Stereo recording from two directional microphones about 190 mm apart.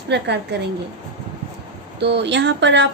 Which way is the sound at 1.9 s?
60° right (ahead or behind).